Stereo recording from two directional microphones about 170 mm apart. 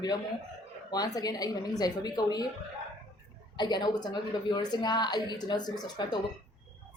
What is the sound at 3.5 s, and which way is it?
Speech, 25° left (ahead or behind).